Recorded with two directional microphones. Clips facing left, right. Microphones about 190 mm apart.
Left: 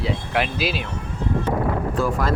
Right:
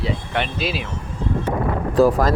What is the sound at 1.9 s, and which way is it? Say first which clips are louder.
Speech: right 10 dB; 40° right (ahead or behind).